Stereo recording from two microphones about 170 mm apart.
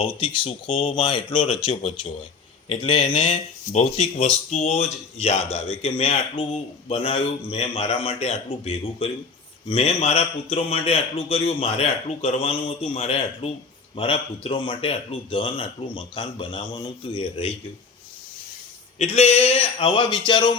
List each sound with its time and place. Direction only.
0.0 s speech: 30° left (ahead or behind)
18.9 s speech: 40° left (ahead or behind)